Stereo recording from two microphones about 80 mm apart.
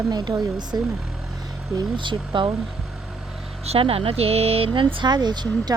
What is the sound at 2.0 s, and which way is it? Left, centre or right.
Speech, right.